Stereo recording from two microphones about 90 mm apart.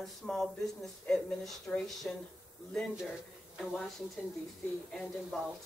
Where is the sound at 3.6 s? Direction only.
Centre (ahead or behind).